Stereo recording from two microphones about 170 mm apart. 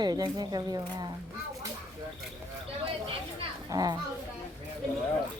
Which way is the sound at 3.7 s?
20° right (ahead or behind).